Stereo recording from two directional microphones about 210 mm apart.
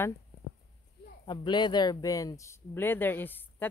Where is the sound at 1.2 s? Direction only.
20° left (ahead or behind).